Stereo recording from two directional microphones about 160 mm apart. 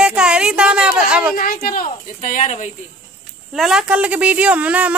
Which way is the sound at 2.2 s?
50° left (ahead or behind).